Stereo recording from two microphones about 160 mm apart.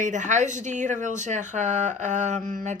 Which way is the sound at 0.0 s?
50° right (ahead or behind).